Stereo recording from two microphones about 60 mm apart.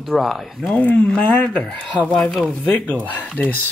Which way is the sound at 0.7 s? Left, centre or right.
Left.